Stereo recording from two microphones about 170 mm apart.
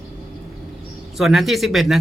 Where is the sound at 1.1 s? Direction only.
Centre (ahead or behind).